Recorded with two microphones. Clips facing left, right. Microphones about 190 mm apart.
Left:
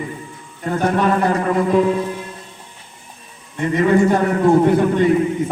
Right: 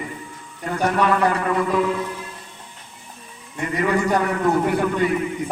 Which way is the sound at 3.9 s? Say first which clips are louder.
Left 5 dB; 30° left (ahead or behind).